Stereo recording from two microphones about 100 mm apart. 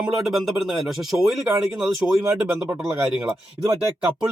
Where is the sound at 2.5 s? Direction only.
15° right (ahead or behind).